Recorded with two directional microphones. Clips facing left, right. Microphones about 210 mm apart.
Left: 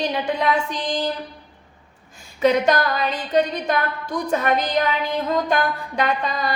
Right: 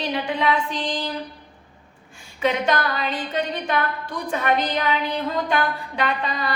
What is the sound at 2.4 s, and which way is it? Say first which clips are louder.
A woman's voice: left 4 dB; 40° left (ahead or behind).